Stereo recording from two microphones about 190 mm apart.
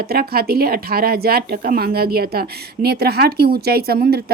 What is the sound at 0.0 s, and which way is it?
Speech, 55° right (ahead or behind).